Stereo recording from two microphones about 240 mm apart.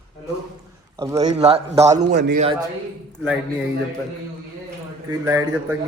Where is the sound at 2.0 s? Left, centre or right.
Right.